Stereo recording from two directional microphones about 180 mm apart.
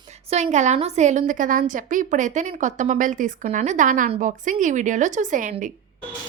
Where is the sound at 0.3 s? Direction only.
40° right (ahead or behind).